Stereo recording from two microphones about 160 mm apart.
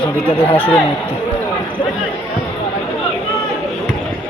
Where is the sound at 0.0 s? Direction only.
35° left (ahead or behind).